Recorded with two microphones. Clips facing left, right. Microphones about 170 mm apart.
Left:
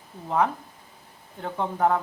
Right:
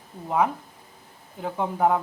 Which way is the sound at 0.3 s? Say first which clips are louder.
Right 1 dB; 5° right (ahead or behind).